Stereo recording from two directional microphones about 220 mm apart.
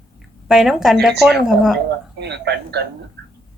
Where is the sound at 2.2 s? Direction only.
50° right (ahead or behind).